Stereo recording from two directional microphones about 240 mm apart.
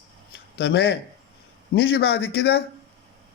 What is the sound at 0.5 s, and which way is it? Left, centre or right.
Speech, left.